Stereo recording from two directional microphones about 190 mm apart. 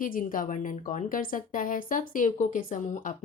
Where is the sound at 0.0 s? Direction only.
45° left (ahead or behind).